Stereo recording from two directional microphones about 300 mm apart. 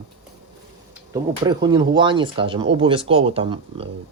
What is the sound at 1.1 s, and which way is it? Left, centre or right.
Speech, centre.